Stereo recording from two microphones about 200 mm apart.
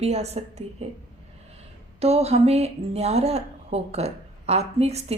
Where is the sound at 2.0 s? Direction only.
30° right (ahead or behind).